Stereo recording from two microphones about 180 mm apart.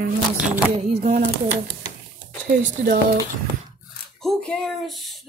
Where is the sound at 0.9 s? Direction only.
35° right (ahead or behind).